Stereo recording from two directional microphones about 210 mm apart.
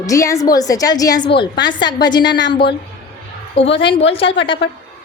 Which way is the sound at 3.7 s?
25° left (ahead or behind).